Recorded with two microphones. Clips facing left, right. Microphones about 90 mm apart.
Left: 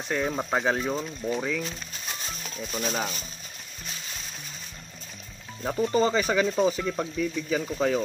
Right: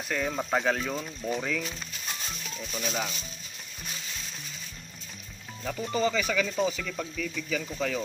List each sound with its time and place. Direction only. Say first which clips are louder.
0.1 s speech: left 2 dB; 25° left (ahead or behind)
2.4 s speech: left 4 dB; 40° left (ahead or behind)
5.6 s speech: left 5 dB; 35° left (ahead or behind)